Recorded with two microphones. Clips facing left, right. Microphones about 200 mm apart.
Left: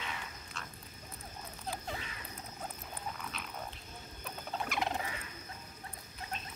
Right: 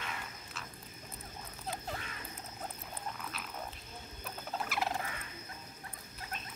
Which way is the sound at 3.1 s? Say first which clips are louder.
Even; centre (ahead or behind).